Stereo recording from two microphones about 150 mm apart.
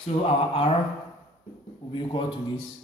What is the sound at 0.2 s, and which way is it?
Speech, 40° left (ahead or behind).